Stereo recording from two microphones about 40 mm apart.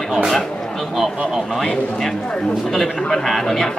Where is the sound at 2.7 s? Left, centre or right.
Centre.